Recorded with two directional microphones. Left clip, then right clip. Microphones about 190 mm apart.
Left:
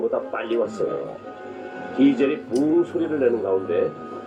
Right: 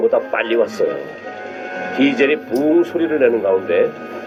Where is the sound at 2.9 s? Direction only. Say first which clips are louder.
Right 6 dB; 55° right (ahead or behind).